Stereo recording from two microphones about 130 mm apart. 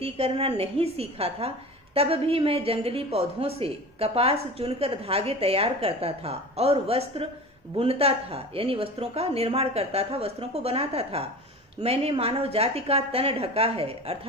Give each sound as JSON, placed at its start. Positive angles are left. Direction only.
{"t": 0.0, "sound": "a woman's voice", "side_deg": -50}